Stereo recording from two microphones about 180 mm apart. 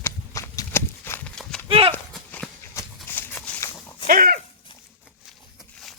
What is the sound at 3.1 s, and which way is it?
Shuffling cards, 10° left (ahead or behind).